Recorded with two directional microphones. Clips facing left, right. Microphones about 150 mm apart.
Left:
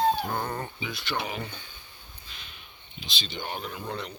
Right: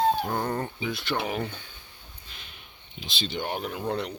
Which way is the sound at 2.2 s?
50° right (ahead or behind).